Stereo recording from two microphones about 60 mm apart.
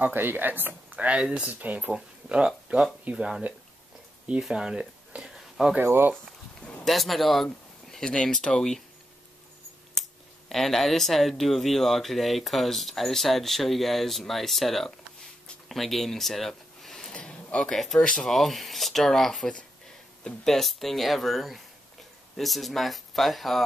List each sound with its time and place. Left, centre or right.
0.0 s speech: right
0.9 s speech: right
1.5 s speech: right
1.9 s speech: centre
5.9 s speech: right
6.6 s speech: centre
7.9 s speech: centre
10.5 s speech: centre
17.1 s a sound: centre
17.7 s speech: centre